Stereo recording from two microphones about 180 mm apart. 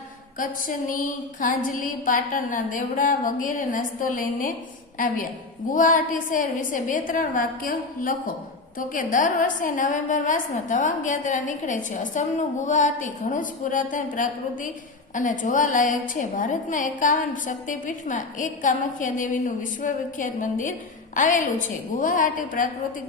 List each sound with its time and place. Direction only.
0.3 s a woman's voice: 50° left (ahead or behind)